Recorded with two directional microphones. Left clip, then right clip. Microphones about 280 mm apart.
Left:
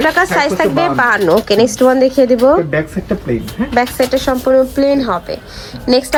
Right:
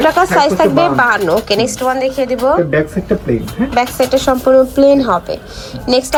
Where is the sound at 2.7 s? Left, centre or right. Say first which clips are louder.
Right 3 dB; centre.